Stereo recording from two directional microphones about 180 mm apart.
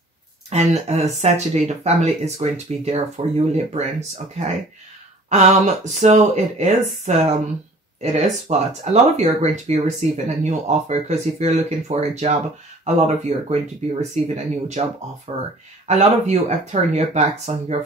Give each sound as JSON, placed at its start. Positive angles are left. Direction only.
{"t": 0.5, "sound": "speech", "side_deg": -35}
{"t": 5.3, "sound": "speech", "side_deg": -40}